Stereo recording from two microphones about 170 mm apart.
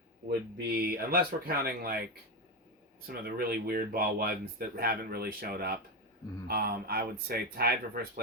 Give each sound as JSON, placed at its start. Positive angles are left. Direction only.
{"t": 0.3, "sound": "speech", "side_deg": -65}
{"t": 3.1, "sound": "speech", "side_deg": -60}